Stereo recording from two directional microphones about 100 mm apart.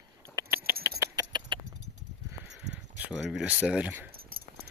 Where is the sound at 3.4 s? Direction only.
15° right (ahead or behind).